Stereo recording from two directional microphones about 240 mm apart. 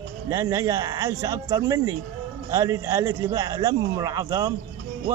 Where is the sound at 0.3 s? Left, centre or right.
Centre.